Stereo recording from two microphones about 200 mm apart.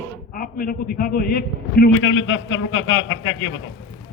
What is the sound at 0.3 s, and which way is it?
A man's voice, 45° left (ahead or behind).